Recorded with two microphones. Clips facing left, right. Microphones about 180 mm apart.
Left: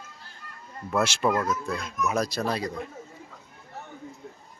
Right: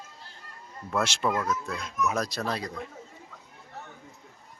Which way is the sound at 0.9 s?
5° left (ahead or behind).